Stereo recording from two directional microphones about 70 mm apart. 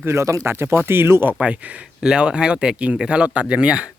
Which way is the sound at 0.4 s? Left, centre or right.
Right.